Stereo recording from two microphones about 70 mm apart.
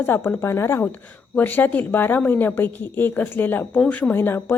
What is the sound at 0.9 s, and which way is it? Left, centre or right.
A woman's voice, left.